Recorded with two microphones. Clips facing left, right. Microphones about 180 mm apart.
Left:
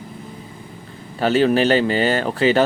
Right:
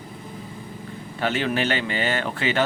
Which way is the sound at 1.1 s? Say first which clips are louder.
Left 8 dB; 35° left (ahead or behind).